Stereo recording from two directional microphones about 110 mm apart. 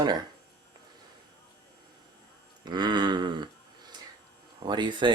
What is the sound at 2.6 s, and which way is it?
Speech, 40° right (ahead or behind).